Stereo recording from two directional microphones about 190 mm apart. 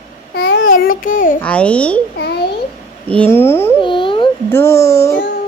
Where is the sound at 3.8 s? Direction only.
25° left (ahead or behind).